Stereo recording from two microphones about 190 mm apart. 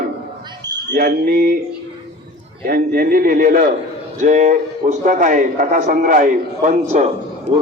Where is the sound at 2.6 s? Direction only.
50° right (ahead or behind).